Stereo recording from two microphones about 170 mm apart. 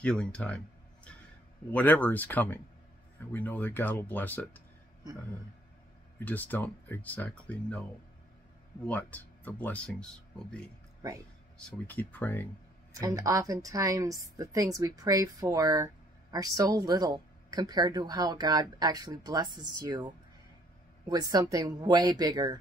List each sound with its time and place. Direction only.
0.0 s speech: 5° left (ahead or behind)
1.7 s speech: 10° left (ahead or behind)
6.1 s speech: 10° left (ahead or behind)
8.8 s speech: 10° left (ahead or behind)
11.5 s speech: 10° left (ahead or behind)
13.1 s a woman's voice: 20° right (ahead or behind)
21.1 s a woman's voice: 20° right (ahead or behind)